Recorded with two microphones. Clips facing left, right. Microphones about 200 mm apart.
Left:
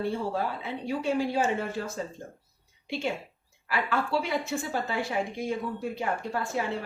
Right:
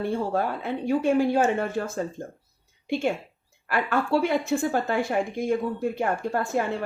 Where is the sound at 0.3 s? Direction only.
55° right (ahead or behind).